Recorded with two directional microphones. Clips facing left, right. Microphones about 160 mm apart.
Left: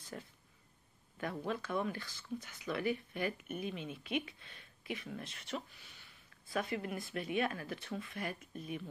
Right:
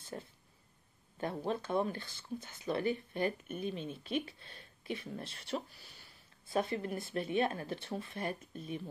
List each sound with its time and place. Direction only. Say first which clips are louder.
0.1 s speech: right 3 dB; 30° right (ahead or behind)